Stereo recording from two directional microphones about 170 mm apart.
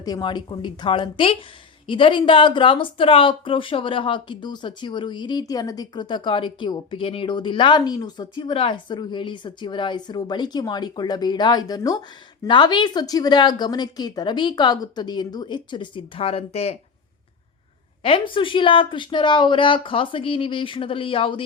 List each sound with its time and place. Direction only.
0.0 s speech: 25° left (ahead or behind)
18.0 s a woman's voice: 30° left (ahead or behind)